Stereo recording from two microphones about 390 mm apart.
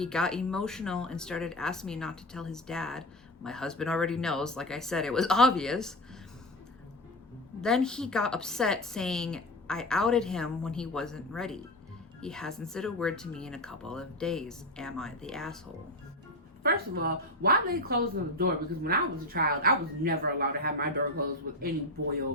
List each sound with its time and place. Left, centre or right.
0.0 s a woman's voice: centre
7.6 s a woman's voice: centre
16.6 s speech: right